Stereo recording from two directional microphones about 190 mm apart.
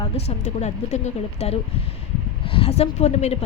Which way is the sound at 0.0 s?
35° left (ahead or behind).